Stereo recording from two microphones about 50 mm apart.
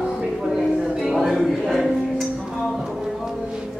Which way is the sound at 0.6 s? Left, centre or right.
Centre.